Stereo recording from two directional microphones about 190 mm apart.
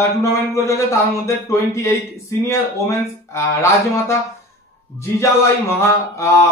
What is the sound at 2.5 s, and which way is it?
A man's voice, 15° left (ahead or behind).